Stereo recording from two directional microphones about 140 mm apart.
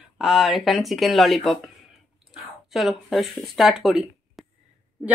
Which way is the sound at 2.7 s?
Centre (ahead or behind).